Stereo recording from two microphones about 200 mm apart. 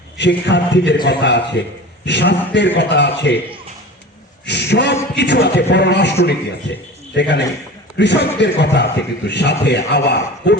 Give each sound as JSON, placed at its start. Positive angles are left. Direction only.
{"t": 0.2, "sound": "a man's voice", "side_deg": 60}
{"t": 4.4, "sound": "a man's voice", "side_deg": 60}